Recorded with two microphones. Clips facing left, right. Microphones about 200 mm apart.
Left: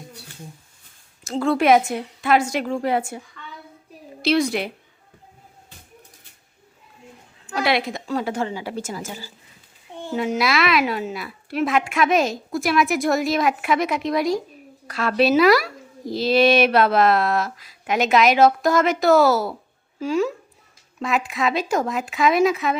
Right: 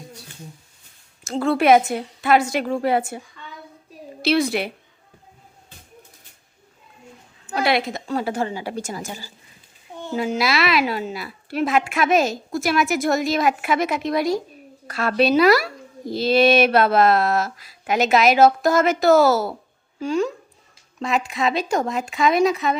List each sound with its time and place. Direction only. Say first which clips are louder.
1.3 s speech: right 1 dB; 5° right (ahead or behind)
4.2 s speech: even; 5° right (ahead or behind)
7.5 s a woman's voice: right 1 dB; centre (ahead or behind)
8.4 s a woman's voice: right 1 dB; 40° right (ahead or behind)
10.2 s speech: even; centre (ahead or behind)
14.8 s speech: even; 50° right (ahead or behind)
15.1 s speech: even; centre (ahead or behind)